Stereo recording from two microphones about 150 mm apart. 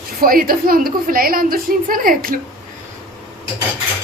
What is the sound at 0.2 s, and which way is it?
A woman's voice, 75° right (ahead or behind).